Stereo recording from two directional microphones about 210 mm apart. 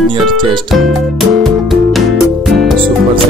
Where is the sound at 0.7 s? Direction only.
Centre (ahead or behind).